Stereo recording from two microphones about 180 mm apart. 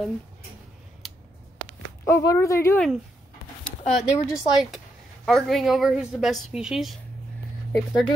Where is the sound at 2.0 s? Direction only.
15° left (ahead or behind).